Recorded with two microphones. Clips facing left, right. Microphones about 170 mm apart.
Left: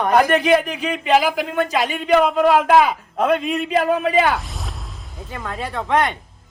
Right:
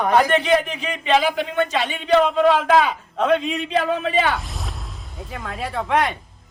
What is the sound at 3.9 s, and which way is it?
Speech, 45° left (ahead or behind).